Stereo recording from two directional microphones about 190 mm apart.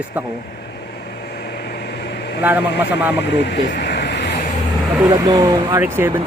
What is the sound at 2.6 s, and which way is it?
Speech, 65° left (ahead or behind).